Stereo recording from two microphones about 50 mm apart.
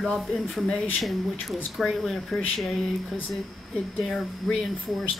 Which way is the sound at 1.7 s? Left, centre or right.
Centre.